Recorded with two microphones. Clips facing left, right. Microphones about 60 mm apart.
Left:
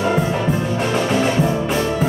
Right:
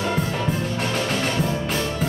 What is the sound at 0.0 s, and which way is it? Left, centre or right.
Music, centre.